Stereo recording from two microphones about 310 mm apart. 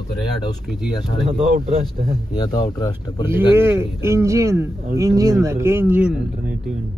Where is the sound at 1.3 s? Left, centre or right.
Right.